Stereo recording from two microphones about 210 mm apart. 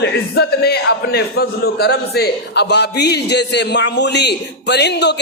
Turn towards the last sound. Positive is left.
turn(degrees=55)  # may be behind; listen again after turning